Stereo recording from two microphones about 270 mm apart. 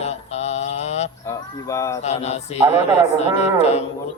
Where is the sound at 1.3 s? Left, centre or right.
Centre.